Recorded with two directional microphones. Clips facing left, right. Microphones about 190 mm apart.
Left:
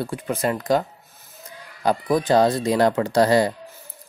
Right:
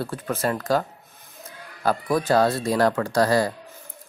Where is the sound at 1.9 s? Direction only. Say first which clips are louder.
Left 2 dB; 15° left (ahead or behind).